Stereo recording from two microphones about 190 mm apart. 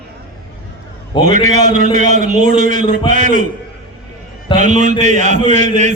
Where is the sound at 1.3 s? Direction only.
40° right (ahead or behind).